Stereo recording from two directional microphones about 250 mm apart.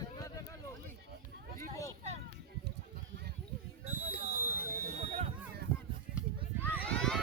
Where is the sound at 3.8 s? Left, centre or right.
Right.